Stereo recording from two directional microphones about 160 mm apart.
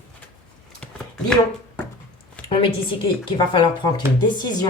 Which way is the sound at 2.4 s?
35° left (ahead or behind).